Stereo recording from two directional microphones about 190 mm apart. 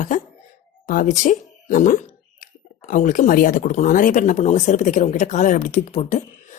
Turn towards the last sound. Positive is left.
turn(degrees=35)  # may be behind; listen again after turning